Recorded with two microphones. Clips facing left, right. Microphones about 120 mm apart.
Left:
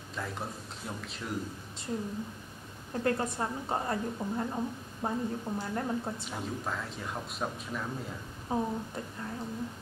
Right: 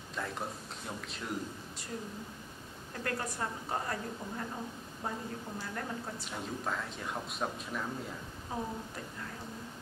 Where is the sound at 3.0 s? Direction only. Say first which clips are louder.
Left 6 dB; 25° left (ahead or behind).